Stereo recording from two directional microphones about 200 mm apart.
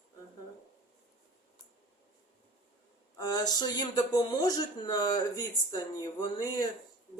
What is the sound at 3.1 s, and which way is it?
Speech, 20° left (ahead or behind).